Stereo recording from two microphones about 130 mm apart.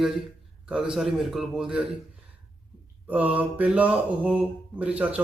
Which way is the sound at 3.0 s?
10° right (ahead or behind).